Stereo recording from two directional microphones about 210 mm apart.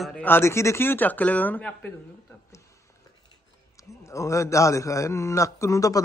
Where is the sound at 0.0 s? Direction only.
5° left (ahead or behind).